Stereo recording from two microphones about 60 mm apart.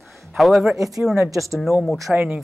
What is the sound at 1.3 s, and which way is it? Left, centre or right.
Speech, right.